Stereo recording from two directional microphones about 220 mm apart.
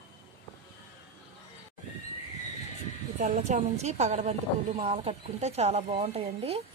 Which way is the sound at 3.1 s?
35° right (ahead or behind).